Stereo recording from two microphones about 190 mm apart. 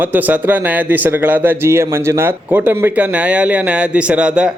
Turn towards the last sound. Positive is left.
turn(degrees=-5)  # may be behind; listen again after turning